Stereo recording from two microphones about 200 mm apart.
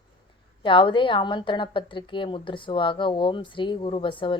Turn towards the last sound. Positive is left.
turn(degrees=25)  # may be behind; listen again after turning